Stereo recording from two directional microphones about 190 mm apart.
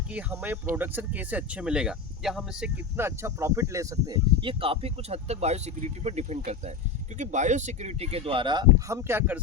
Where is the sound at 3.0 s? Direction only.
15° right (ahead or behind).